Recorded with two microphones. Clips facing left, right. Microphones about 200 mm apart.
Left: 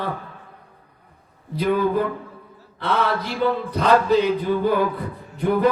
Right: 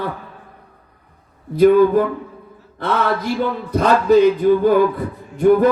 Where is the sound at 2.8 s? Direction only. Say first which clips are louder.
Right 3 dB; 45° right (ahead or behind).